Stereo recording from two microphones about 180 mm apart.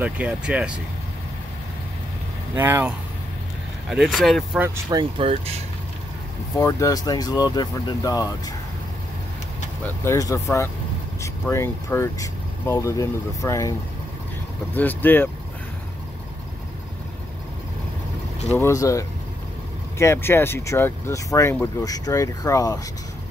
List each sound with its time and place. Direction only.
0.0 s speech: 5° right (ahead or behind)
2.5 s speech: 10° right (ahead or behind)
3.9 s speech: centre (ahead or behind)
4.8 s speech: 25° right (ahead or behind)
6.6 s speech: 20° left (ahead or behind)
10.0 s speech: 20° left (ahead or behind)
18.5 s speech: 15° left (ahead or behind)